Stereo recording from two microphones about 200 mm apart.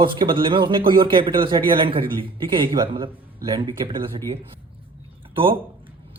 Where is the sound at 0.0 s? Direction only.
25° right (ahead or behind).